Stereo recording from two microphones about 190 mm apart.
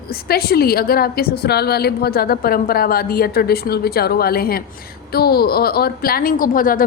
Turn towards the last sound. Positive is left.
turn(degrees=45)  # may be behind; listen again after turning